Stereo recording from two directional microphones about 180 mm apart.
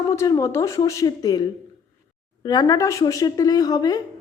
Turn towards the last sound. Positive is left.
turn(degrees=20)  # may be behind; listen again after turning